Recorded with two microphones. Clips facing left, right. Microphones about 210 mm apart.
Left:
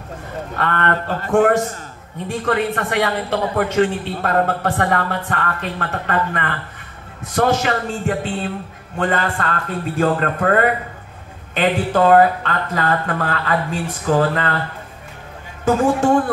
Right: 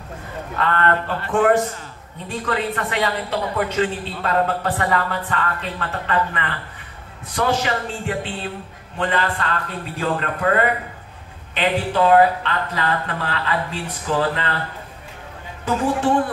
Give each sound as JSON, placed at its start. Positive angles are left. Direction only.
{"t": 0.6, "sound": "a woman's voice", "side_deg": 50}
{"t": 15.6, "sound": "a woman's voice", "side_deg": 45}